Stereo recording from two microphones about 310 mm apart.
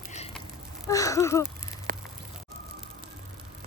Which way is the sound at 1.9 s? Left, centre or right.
Right.